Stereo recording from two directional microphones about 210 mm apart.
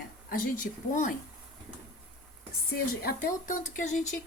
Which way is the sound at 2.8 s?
45° left (ahead or behind).